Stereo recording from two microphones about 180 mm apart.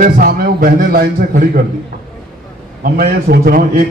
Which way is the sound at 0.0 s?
55° right (ahead or behind).